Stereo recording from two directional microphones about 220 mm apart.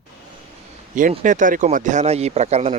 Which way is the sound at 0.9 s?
35° right (ahead or behind).